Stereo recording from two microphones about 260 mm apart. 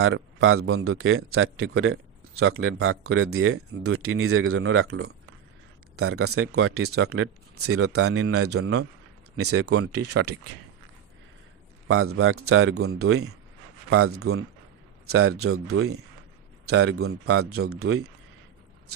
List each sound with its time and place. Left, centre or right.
0.0 s speech: right
11.9 s speech: right